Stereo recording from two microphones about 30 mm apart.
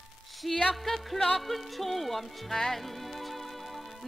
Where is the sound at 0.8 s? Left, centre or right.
Centre.